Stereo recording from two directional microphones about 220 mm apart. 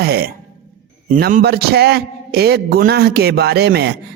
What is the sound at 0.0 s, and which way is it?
A man's voice, 45° right (ahead or behind).